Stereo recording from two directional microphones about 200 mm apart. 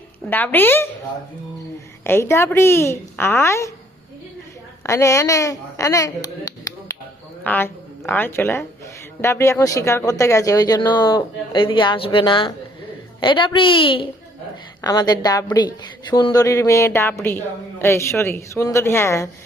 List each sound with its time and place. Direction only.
0.3 s a woman's voice: 10° left (ahead or behind)
2.0 s a woman's voice: 10° left (ahead or behind)
4.8 s a woman's voice: 15° left (ahead or behind)